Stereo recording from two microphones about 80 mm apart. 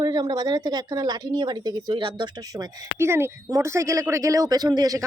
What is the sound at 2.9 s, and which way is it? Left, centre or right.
A woman's voice, right.